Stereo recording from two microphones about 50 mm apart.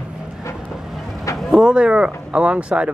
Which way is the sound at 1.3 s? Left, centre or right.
Centre.